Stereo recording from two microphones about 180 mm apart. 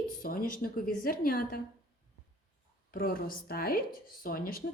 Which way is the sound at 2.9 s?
55° left (ahead or behind).